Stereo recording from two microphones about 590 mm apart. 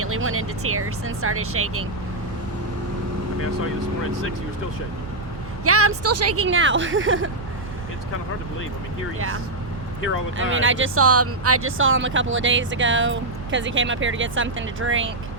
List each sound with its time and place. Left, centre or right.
0.0 s speech: right
5.6 s speech: right
9.1 s speech: right